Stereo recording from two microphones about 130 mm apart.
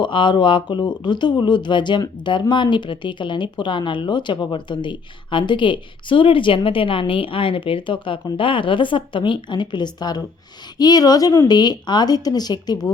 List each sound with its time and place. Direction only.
0.0 s speech: 40° left (ahead or behind)